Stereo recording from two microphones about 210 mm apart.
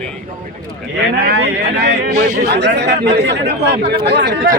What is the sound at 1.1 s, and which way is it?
Speech, 50° right (ahead or behind).